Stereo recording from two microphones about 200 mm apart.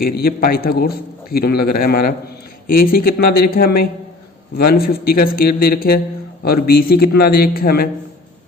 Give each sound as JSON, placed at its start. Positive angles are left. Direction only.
{"t": 0.0, "sound": "a man's voice", "side_deg": 50}